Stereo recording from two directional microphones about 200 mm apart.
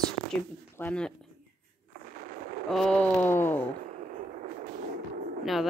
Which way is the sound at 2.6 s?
Centre (ahead or behind).